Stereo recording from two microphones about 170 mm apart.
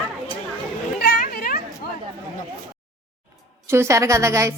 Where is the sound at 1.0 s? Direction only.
60° left (ahead or behind).